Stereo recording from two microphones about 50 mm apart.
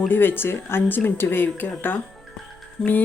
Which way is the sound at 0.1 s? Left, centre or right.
Left.